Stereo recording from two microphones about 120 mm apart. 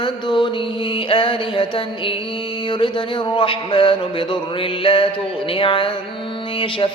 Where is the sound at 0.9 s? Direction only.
45° left (ahead or behind).